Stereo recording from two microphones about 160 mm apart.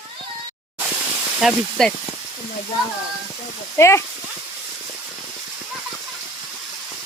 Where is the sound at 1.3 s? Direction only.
Centre (ahead or behind).